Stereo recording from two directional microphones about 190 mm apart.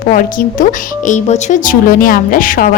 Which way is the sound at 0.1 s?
45° left (ahead or behind).